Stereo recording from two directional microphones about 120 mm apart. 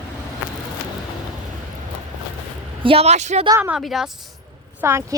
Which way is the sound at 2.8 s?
50° right (ahead or behind).